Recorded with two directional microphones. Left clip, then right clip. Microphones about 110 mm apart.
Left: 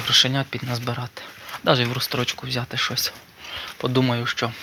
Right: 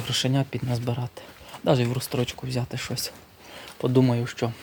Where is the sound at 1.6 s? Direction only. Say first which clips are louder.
Left 4 dB; 25° right (ahead or behind).